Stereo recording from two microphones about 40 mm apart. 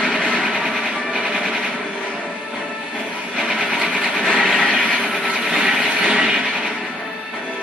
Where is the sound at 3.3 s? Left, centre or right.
Centre.